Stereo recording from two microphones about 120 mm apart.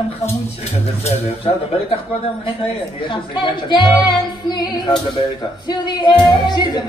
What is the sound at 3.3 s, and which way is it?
Music, 40° left (ahead or behind).